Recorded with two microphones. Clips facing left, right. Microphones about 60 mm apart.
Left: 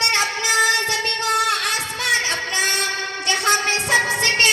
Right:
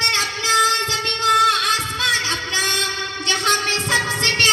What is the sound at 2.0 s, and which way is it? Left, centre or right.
Music, left.